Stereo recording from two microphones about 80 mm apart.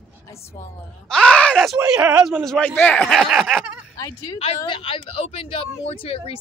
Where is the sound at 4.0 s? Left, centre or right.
Left.